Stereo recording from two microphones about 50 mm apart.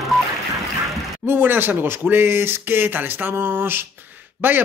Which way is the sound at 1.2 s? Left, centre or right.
Right.